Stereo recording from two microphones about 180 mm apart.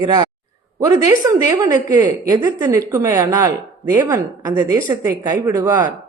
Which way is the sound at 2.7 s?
15° right (ahead or behind).